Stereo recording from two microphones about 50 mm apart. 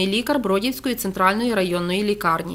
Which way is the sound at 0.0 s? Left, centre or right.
Centre.